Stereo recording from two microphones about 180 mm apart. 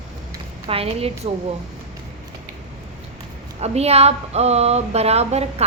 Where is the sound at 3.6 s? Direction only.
35° right (ahead or behind).